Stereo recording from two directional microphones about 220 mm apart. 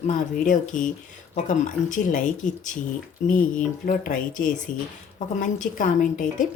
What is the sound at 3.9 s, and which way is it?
Speech, 35° left (ahead or behind).